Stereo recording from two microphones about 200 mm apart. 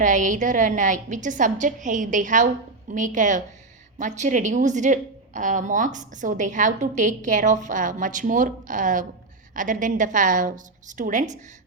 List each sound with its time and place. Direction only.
0.0 s a woman's voice: 40° right (ahead or behind)